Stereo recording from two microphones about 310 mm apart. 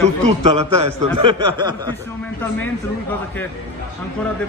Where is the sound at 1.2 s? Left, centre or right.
Centre.